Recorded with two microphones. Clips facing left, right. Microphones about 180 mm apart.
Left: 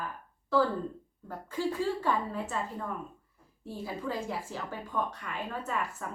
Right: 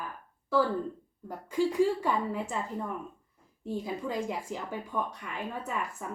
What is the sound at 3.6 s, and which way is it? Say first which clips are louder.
A woman's voice: right 2 dB; 15° right (ahead or behind).